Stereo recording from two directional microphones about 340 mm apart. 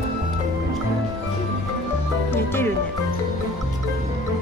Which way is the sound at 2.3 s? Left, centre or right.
Centre.